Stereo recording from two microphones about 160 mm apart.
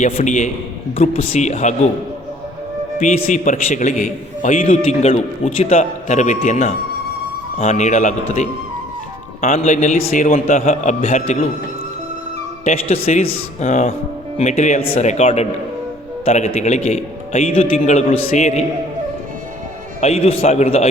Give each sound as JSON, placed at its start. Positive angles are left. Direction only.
{"t": 0.0, "sound": "a man's voice", "side_deg": 45}
{"t": 3.3, "sound": "a man's voice", "side_deg": 55}
{"t": 4.7, "sound": "a man's voice", "side_deg": 45}
{"t": 12.6, "sound": "a man's voice", "side_deg": 45}
{"t": 20.0, "sound": "a man's voice", "side_deg": 40}